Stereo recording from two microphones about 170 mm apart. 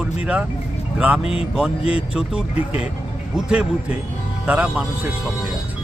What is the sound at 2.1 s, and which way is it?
Speech, 5° right (ahead or behind).